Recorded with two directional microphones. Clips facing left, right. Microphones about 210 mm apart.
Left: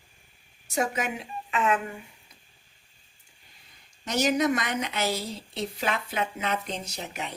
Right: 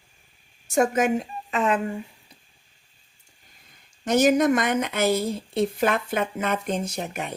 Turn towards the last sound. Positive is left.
turn(degrees=-50)  # may be behind; listen again after turning